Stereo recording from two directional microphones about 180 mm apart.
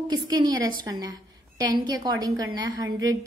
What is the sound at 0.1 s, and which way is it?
A woman's voice, 20° right (ahead or behind).